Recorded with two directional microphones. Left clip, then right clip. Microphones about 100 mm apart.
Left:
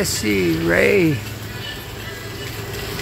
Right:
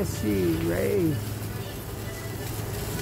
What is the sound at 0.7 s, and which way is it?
Speech, 45° left (ahead or behind).